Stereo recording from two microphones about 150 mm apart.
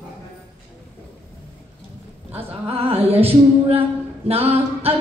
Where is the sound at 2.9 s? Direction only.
40° right (ahead or behind).